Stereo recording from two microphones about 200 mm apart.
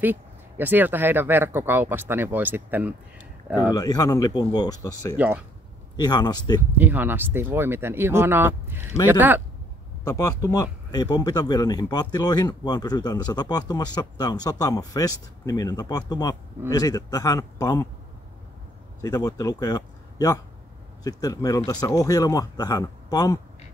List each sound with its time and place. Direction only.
0.0 s speech: 10° right (ahead or behind)
3.7 s speech: 20° left (ahead or behind)
5.1 s speech: 5° right (ahead or behind)
5.9 s speech: 20° left (ahead or behind)
6.8 s speech: 10° right (ahead or behind)
10.0 s speech: 15° left (ahead or behind)
18.9 s speech: 20° left (ahead or behind)